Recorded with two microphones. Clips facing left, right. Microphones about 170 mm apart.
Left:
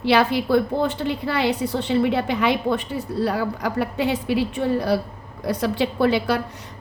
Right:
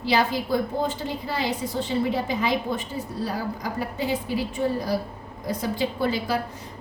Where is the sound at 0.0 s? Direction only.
65° left (ahead or behind).